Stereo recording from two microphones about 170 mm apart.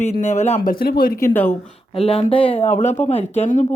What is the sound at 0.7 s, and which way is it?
Speech, 65° left (ahead or behind).